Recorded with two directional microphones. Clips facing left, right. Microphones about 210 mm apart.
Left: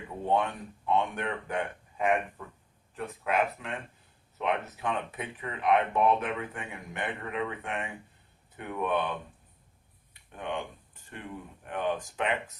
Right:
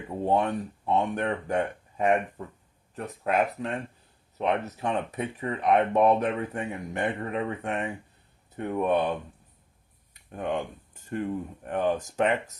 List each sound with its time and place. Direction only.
0.3 s speech: 40° right (ahead or behind)
10.2 s speech: 45° right (ahead or behind)